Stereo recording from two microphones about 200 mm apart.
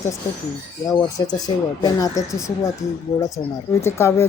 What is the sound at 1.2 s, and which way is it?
A woman's voice, 20° left (ahead or behind).